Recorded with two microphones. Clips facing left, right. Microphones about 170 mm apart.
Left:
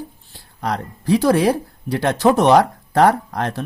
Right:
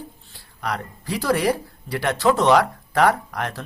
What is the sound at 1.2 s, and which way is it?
Speech, 50° left (ahead or behind).